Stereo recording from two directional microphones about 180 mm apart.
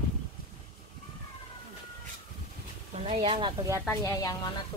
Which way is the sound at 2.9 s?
30° right (ahead or behind).